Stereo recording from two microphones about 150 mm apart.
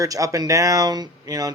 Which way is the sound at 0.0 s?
20° right (ahead or behind).